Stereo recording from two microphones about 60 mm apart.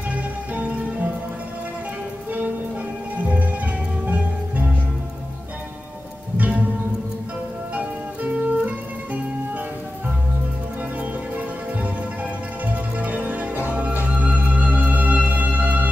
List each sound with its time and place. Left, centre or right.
0.1 s music: right
3.2 s music: right
6.3 s music: right
7.7 s music: right
10.8 s music: right